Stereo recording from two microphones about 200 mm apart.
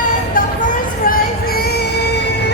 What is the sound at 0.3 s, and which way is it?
Music, 45° left (ahead or behind).